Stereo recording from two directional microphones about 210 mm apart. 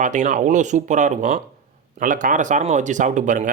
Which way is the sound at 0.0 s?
35° right (ahead or behind).